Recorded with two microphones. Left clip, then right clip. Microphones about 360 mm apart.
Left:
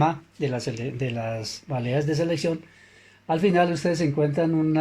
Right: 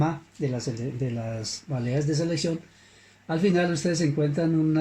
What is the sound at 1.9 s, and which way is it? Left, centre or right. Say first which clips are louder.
Speech: left 3 dB; left.